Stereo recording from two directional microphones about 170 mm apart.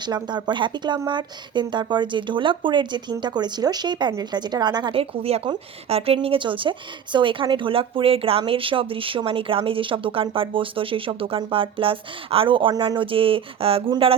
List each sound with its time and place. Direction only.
0.0 s a woman's voice: 25° right (ahead or behind)